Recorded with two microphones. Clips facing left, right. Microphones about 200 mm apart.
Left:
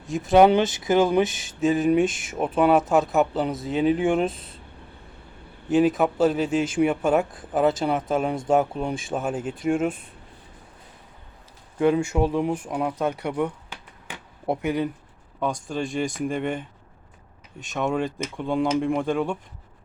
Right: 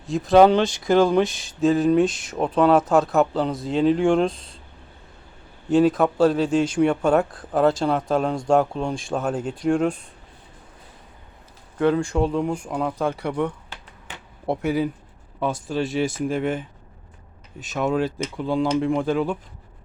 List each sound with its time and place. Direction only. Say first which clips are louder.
0.2 s speech: right 2 dB; 15° left (ahead or behind)
1.0 s speech: right 2 dB; 5° left (ahead or behind)
5.6 s speech: right 2 dB; centre (ahead or behind)
11.8 s speech: even; 15° left (ahead or behind); by 19.4 s 5° right (ahead or behind)